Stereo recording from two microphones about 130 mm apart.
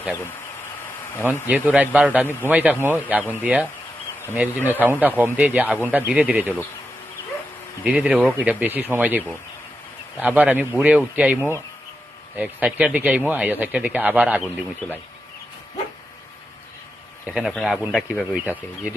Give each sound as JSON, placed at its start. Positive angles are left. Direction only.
{"t": 1.2, "sound": "speech", "side_deg": -15}
{"t": 7.9, "sound": "speech", "side_deg": -10}
{"t": 17.2, "sound": "speech", "side_deg": 0}